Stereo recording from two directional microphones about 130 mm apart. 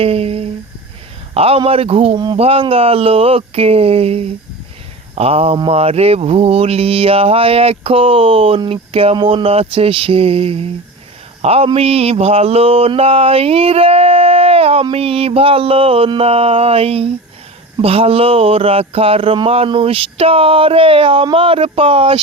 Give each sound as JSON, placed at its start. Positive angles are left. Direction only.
{"t": 0.0, "sound": "mantra", "side_deg": -50}
{"t": 2.1, "sound": "speech", "side_deg": -35}
{"t": 2.4, "sound": "mantra", "side_deg": -45}